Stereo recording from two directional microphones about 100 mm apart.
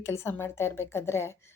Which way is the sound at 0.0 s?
25° left (ahead or behind).